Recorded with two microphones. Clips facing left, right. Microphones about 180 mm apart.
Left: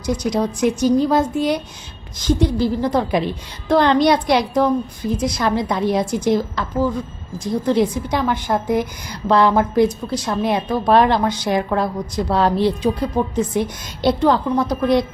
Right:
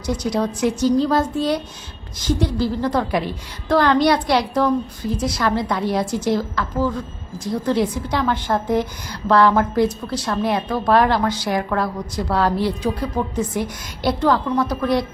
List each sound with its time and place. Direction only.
0.0 s a woman's voice: 10° left (ahead or behind)